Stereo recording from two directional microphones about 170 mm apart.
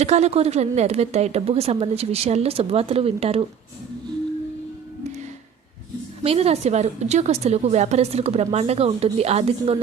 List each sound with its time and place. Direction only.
0.0 s a woman's voice: 40° right (ahead or behind)
6.2 s a woman's voice: 35° right (ahead or behind)